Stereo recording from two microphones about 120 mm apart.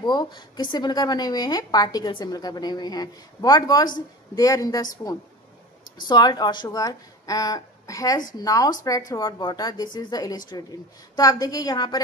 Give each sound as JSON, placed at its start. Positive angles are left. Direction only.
{"t": 0.0, "sound": "a woman's voice", "side_deg": 35}
{"t": 6.0, "sound": "a woman's voice", "side_deg": 35}